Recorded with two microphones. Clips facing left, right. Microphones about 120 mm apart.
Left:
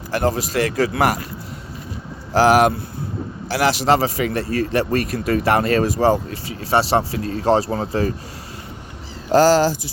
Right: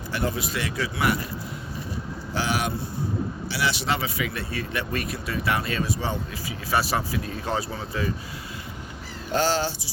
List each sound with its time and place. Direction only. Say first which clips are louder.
0.3 s speech: left 9 dB; 45° left (ahead or behind)
2.3 s speech: left 13 dB; 90° left
3.6 s speech: left 10 dB; 40° left (ahead or behind)
7.7 s speech: left 8 dB; 45° left (ahead or behind)
9.4 s speech: left 10 dB; 45° left (ahead or behind)